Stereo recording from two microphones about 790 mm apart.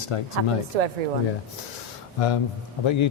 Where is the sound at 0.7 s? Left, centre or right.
Right.